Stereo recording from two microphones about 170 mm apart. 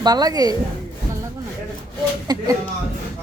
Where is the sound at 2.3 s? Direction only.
25° right (ahead or behind).